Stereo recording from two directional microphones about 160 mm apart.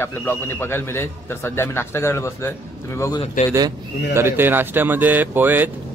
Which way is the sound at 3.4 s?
55° left (ahead or behind).